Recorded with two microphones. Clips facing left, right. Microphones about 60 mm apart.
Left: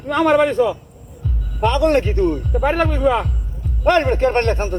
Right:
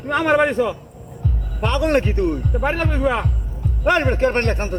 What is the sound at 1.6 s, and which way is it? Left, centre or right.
Speech, centre.